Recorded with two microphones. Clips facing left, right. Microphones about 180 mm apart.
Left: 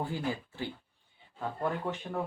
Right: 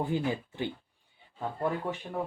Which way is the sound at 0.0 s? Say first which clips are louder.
Right 4 dB; 20° right (ahead or behind).